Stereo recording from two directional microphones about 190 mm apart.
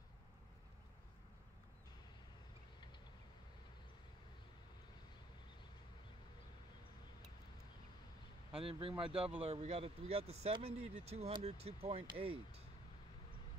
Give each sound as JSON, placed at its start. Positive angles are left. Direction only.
{"t": 8.6, "sound": "speech", "side_deg": -30}